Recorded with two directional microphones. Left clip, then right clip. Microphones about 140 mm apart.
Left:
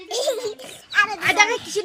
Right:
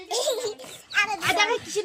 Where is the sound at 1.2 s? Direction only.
20° left (ahead or behind).